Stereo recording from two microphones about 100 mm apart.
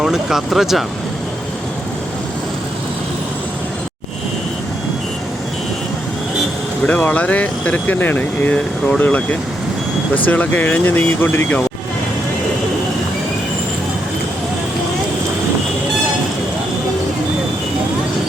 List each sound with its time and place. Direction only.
0.0 s speech: 5° right (ahead or behind)
6.8 s speech: 15° left (ahead or behind)
10.2 s speech: 15° left (ahead or behind)